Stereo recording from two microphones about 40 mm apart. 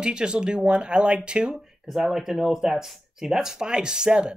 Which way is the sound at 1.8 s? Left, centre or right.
Centre.